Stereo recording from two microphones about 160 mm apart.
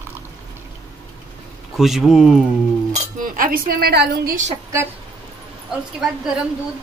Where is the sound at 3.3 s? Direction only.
60° right (ahead or behind).